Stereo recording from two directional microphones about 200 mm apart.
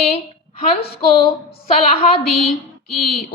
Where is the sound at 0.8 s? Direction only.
30° left (ahead or behind).